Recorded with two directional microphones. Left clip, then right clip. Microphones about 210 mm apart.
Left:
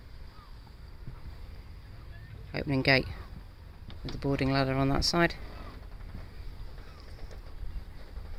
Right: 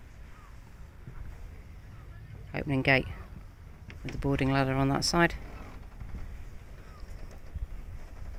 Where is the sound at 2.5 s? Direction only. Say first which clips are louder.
Even; 5° right (ahead or behind).